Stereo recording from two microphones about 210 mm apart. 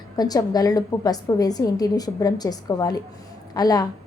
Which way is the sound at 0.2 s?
20° left (ahead or behind).